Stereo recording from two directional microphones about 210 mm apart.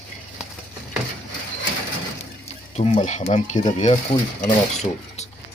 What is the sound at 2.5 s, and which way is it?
Speech, 30° left (ahead or behind).